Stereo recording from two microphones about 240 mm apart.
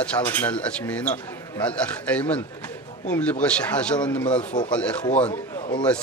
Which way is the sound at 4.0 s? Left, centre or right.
Centre.